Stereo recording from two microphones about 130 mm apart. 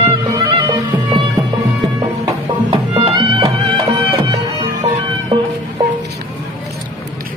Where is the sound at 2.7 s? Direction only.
40° right (ahead or behind).